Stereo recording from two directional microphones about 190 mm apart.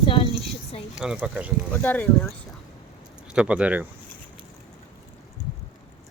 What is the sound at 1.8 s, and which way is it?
Speech, 10° left (ahead or behind).